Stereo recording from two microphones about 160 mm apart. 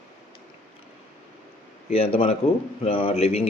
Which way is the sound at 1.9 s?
40° left (ahead or behind).